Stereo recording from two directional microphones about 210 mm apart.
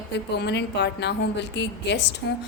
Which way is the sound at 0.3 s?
55° left (ahead or behind).